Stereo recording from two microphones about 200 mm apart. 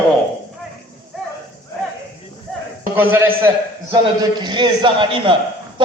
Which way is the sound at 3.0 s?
10° right (ahead or behind).